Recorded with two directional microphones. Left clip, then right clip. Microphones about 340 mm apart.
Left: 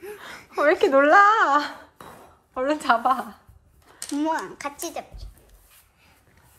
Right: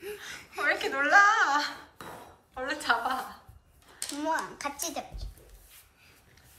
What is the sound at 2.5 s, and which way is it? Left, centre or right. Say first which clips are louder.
A woman's voice: left 7 dB; centre.